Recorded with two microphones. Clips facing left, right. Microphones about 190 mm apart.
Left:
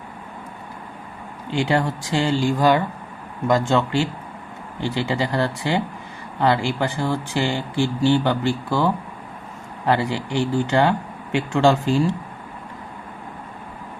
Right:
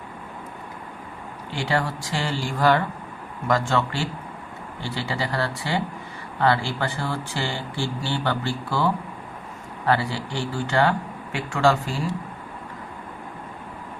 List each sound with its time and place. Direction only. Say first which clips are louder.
1.5 s speech: left 5 dB; 20° left (ahead or behind)